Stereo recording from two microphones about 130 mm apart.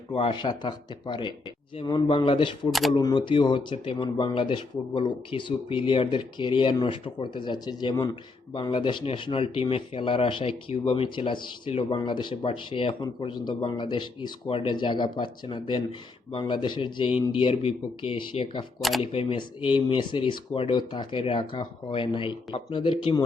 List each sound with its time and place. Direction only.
0.1 s speech: 40° left (ahead or behind)
18.8 s speech: centre (ahead or behind)
19.1 s speech: 45° left (ahead or behind)